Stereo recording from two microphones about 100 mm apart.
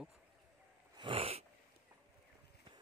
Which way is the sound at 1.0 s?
70° right (ahead or behind).